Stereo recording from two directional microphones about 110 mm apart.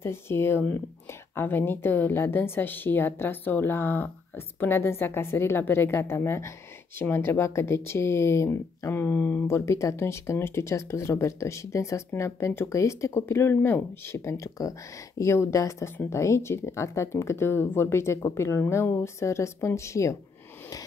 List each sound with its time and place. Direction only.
0.0 s speech: 20° left (ahead or behind)